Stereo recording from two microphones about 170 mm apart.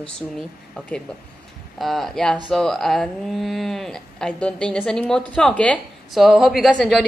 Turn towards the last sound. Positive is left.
turn(degrees=0)  # may be behind; listen again after turning